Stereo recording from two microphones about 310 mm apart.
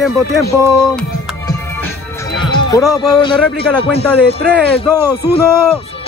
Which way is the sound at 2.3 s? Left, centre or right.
Centre.